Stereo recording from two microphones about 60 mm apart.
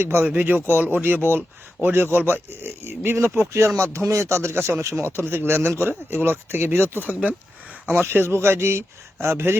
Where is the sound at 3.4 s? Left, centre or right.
Right.